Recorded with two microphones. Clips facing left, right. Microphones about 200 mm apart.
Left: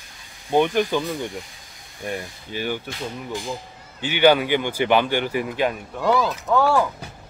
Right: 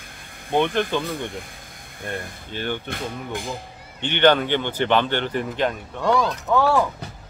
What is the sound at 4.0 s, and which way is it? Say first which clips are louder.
Speech: left 1 dB; 5° left (ahead or behind).